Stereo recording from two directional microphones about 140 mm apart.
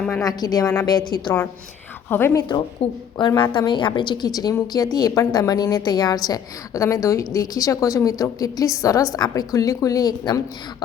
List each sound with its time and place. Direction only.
0.1 s a woman's voice: 20° left (ahead or behind)
2.0 s speech: 15° left (ahead or behind)
2.3 s a woman's voice: 35° left (ahead or behind)